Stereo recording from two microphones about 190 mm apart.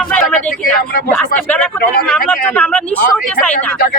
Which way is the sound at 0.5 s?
50° left (ahead or behind).